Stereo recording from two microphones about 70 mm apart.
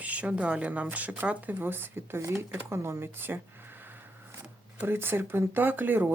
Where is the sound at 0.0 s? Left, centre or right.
Right.